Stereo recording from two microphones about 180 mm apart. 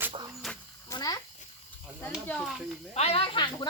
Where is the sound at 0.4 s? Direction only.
Centre (ahead or behind).